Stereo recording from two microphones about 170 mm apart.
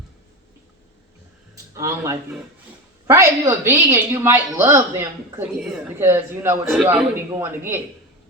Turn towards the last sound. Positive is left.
turn(degrees=-15)  # may be behind; listen again after turning